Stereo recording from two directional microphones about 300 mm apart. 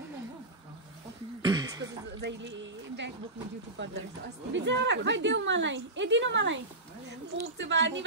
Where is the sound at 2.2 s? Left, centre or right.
Right.